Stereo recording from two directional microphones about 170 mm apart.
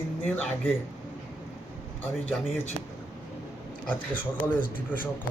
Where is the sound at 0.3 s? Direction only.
10° left (ahead or behind).